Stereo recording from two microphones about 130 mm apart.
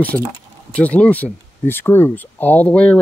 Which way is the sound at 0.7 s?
10° left (ahead or behind).